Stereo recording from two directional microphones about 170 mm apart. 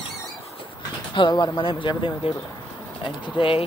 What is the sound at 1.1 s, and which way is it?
Speech, 25° left (ahead or behind).